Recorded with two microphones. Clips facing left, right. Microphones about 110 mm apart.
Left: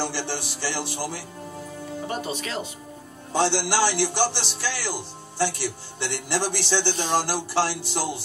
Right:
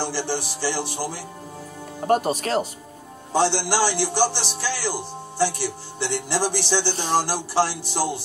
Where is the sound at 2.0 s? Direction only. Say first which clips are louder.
Right 11 dB; 50° right (ahead or behind).